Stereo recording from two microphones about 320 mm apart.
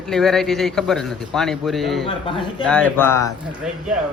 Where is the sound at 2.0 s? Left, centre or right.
Centre.